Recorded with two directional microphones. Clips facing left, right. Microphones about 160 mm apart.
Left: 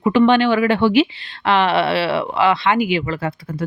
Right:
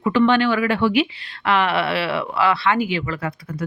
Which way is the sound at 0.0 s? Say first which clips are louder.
Left 3 dB; 20° left (ahead or behind).